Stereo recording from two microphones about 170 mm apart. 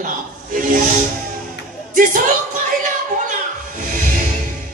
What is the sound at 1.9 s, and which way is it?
Music, 50° right (ahead or behind).